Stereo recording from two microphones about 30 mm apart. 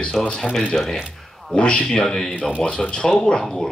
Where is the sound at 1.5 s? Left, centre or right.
Left.